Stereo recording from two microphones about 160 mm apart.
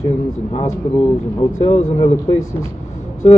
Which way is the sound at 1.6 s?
40° left (ahead or behind).